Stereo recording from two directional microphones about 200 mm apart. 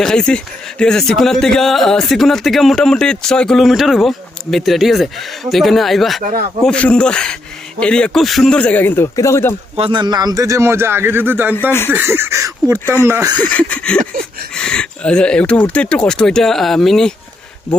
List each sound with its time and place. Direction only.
0.0 s speech: 5° left (ahead or behind)
9.7 s speech: 25° right (ahead or behind)
12.8 s speech: 10° left (ahead or behind)
13.1 s speech: 15° right (ahead or behind)
13.4 s speech: 5° left (ahead or behind)
14.0 s a sound: 45° right (ahead or behind)
14.5 s speech: 5° left (ahead or behind)